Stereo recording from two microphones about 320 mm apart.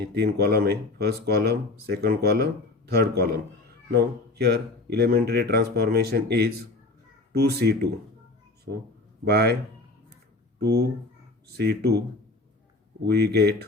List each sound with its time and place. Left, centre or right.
0.1 s speech: right
9.2 s speech: right
10.6 s speech: right
13.1 s speech: right